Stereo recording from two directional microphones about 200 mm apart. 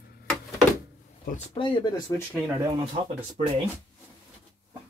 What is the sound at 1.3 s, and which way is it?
Speech, 25° left (ahead or behind).